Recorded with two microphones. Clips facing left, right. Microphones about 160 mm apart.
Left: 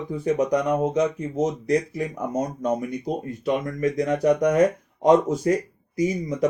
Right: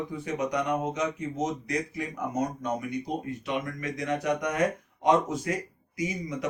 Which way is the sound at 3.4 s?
35° left (ahead or behind).